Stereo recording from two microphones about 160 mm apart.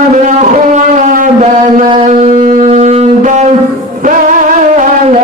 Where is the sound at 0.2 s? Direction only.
50° right (ahead or behind).